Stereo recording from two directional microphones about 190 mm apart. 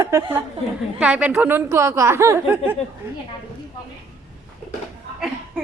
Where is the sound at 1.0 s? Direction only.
5° right (ahead or behind).